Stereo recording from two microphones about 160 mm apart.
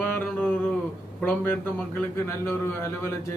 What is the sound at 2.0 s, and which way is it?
A man's voice, 15° left (ahead or behind).